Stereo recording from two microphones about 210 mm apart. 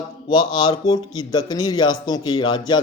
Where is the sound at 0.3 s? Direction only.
20° left (ahead or behind).